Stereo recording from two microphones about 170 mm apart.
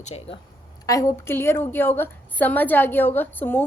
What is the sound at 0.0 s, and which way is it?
Speech, 40° left (ahead or behind).